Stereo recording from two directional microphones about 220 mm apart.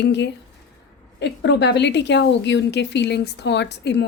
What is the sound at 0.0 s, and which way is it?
A woman's voice, 50° left (ahead or behind).